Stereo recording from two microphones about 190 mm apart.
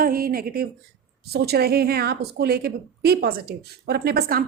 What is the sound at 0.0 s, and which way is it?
A woman's voice, 50° right (ahead or behind).